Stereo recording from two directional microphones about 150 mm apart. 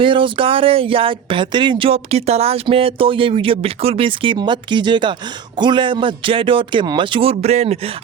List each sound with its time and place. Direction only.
0.0 s speech: 35° right (ahead or behind)